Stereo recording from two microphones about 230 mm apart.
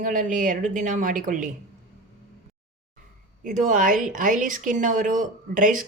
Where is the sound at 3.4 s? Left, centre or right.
Right.